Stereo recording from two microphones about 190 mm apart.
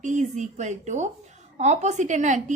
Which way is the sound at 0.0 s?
40° right (ahead or behind).